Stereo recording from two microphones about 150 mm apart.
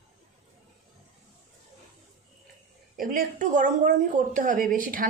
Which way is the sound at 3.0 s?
65° right (ahead or behind).